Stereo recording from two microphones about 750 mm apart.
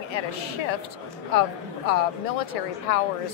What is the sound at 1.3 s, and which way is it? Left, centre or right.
A man's voice, left.